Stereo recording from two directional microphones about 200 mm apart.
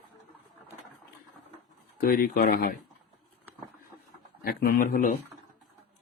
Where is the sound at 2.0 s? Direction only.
45° left (ahead or behind).